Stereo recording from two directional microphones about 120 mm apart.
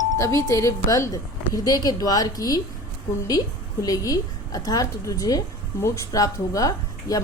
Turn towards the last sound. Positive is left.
turn(degrees=30)  # may be behind; listen again after turning